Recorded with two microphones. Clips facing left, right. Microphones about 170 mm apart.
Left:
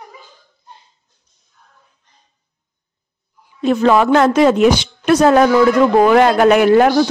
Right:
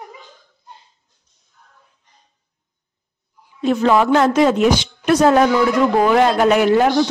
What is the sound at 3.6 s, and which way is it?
A woman's voice, 65° left (ahead or behind).